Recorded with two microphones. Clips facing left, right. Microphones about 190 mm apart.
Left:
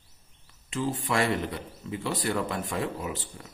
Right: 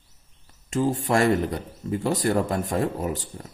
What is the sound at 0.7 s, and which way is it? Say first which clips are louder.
A man's voice: right 6 dB; 45° right (ahead or behind).